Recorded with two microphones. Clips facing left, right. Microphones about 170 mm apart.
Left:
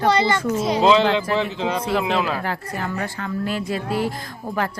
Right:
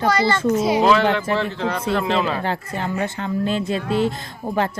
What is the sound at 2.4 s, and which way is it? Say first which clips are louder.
Speech: right 2 dB; 25° right (ahead or behind).